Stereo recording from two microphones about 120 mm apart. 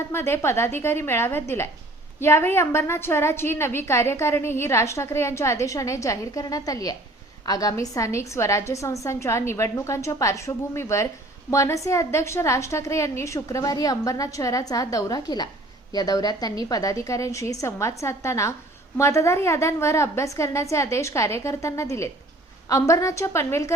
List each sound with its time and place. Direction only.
0.1 s a woman's voice: 20° left (ahead or behind)